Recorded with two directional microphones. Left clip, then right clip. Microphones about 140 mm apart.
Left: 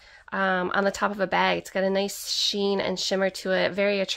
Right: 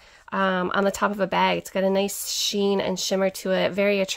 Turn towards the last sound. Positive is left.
turn(degrees=-30)  # may be behind; listen again after turning